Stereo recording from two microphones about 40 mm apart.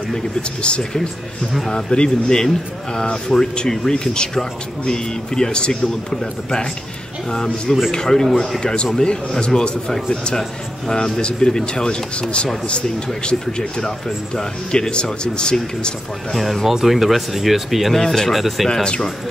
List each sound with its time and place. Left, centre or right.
0.4 s a man's voice: left
11.1 s a man's voice: centre
16.6 s speech: centre
17.9 s speech: centre
18.3 s speech: centre
18.7 s speech: centre